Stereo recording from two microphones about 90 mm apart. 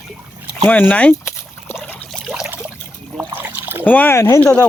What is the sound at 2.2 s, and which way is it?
Trickle, 5° right (ahead or behind).